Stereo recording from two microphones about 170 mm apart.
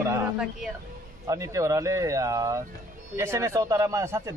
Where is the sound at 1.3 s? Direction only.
20° right (ahead or behind).